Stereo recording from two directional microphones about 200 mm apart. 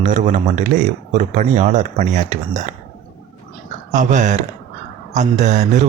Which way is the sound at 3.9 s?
40° right (ahead or behind).